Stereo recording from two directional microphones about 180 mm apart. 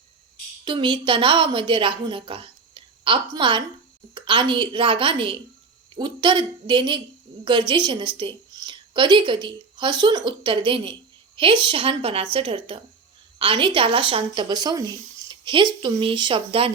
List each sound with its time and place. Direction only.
0.6 s a woman's voice: 25° right (ahead or behind)